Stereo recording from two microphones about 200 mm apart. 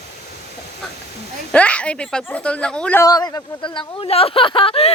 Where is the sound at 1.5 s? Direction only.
5° left (ahead or behind).